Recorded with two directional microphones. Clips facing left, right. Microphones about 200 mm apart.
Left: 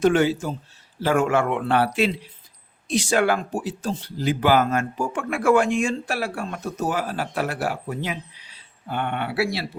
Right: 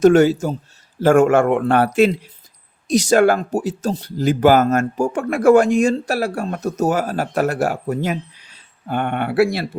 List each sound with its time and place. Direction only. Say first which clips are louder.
0.0 s speech: right 7 dB; 45° right (ahead or behind)